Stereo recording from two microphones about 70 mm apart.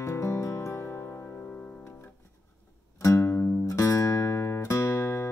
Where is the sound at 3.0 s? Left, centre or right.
Left.